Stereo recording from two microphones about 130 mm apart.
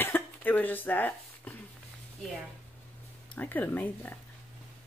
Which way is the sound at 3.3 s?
15° left (ahead or behind).